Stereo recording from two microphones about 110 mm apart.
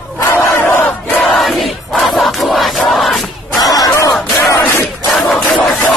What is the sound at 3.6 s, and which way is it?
Battle cry, 35° left (ahead or behind).